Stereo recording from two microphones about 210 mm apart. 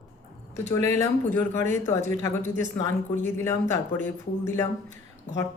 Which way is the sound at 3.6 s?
40° right (ahead or behind).